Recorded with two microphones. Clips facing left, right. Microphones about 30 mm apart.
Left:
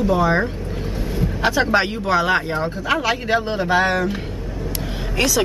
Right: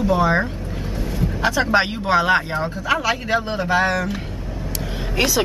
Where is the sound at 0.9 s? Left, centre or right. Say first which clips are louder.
Even; centre.